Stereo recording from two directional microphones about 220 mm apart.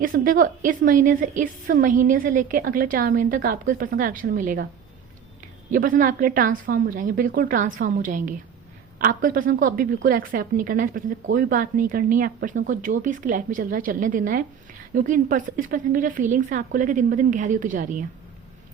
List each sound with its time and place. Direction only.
0.0 s a woman's voice: 40° right (ahead or behind)
5.7 s a woman's voice: 40° right (ahead or behind)